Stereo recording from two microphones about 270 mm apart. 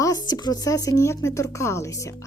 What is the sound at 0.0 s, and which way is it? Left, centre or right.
Speech, centre.